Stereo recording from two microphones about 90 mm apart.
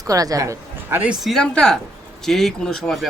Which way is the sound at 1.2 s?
5° left (ahead or behind).